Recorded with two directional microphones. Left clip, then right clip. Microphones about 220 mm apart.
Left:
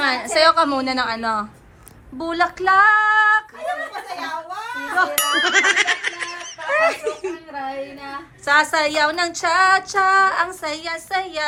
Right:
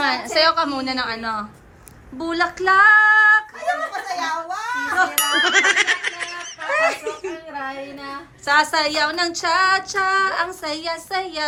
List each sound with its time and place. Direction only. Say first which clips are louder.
0.0 s speech: left 2 dB; 5° right (ahead or behind)
2.1 s female singing: left 1 dB; centre (ahead or behind)
4.2 s giggle: right 3 dB; 5° right (ahead or behind)
8.4 s speech: left 1 dB; 5° right (ahead or behind)